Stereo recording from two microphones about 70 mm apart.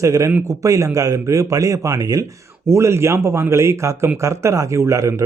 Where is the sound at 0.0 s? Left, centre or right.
Right.